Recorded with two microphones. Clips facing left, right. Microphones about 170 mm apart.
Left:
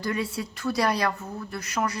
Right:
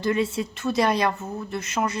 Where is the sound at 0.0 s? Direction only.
25° right (ahead or behind).